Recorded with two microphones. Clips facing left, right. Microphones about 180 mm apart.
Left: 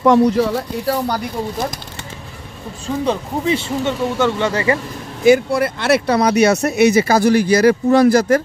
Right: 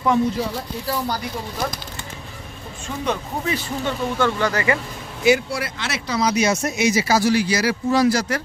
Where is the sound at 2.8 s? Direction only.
30° left (ahead or behind).